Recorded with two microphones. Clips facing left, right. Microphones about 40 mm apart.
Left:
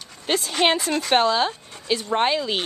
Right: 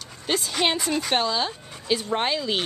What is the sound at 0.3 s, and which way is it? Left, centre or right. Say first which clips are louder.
Speech: left 3 dB; centre.